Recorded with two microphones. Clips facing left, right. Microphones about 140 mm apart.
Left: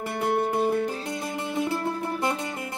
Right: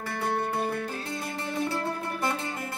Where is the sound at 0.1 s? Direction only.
20° left (ahead or behind).